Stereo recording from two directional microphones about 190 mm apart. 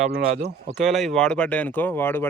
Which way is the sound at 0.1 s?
55° right (ahead or behind).